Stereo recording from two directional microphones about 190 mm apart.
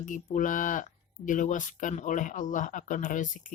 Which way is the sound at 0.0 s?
45° left (ahead or behind).